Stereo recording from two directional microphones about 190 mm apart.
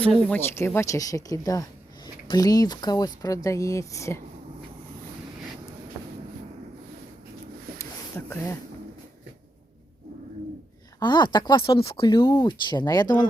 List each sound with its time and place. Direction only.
0.0 s speech: 5° left (ahead or behind)
8.3 s speech: 15° left (ahead or behind)
11.0 s speech: 25° left (ahead or behind)